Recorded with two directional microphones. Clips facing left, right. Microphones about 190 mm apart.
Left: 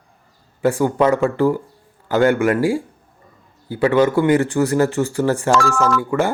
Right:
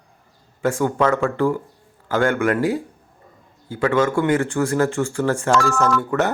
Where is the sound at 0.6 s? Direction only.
15° left (ahead or behind).